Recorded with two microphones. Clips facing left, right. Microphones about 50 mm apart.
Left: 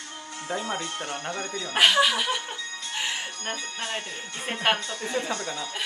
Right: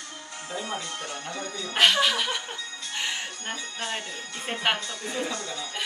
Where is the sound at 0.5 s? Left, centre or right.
Centre.